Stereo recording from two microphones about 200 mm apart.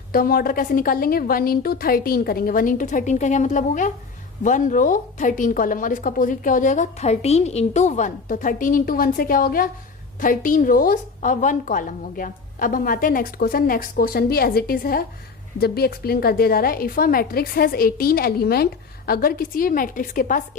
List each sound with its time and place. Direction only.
0.1 s a woman's voice: 45° left (ahead or behind)